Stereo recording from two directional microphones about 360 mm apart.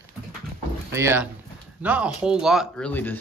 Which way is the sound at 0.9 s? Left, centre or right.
Centre.